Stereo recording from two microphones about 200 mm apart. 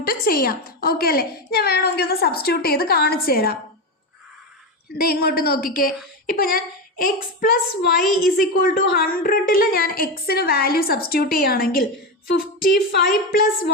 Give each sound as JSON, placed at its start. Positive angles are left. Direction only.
{"t": 0.0, "sound": "a woman's voice", "side_deg": 45}
{"t": 4.9, "sound": "a woman's voice", "side_deg": 50}